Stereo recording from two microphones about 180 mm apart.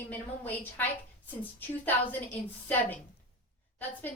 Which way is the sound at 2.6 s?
10° left (ahead or behind).